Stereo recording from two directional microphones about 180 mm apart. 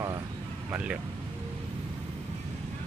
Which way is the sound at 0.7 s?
10° right (ahead or behind).